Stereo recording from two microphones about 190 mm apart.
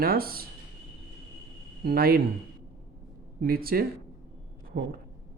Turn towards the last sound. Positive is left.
turn(degrees=-55)  # may be behind; listen again after turning